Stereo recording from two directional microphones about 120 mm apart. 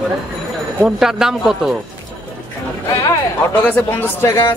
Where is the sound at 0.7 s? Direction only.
5° right (ahead or behind).